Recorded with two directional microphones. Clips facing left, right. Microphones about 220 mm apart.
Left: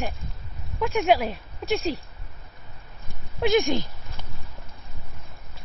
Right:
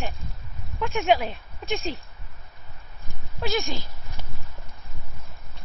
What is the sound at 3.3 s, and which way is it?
Speech, 20° left (ahead or behind).